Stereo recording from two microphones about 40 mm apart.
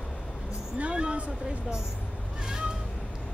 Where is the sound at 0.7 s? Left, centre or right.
Right.